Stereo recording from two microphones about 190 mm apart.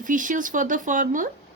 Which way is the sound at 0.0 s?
45° right (ahead or behind).